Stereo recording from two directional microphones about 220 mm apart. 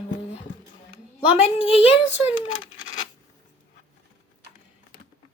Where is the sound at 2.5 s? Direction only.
65° left (ahead or behind).